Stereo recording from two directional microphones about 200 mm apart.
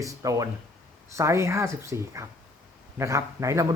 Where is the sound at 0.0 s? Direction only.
15° right (ahead or behind).